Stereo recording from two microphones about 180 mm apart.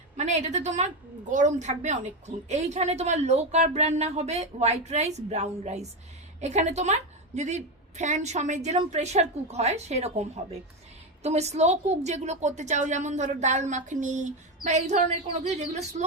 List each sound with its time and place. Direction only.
0.2 s a woman's voice: 40° right (ahead or behind)